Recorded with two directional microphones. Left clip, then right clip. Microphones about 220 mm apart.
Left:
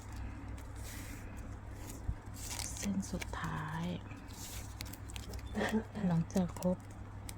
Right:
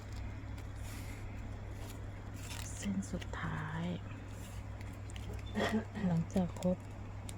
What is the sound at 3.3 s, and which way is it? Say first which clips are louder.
Speech: left 1 dB; centre (ahead or behind).